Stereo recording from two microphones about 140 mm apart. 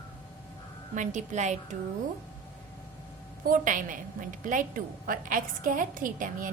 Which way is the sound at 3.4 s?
70° right (ahead or behind).